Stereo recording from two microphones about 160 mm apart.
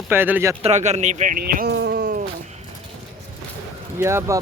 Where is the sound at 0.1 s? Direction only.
15° right (ahead or behind).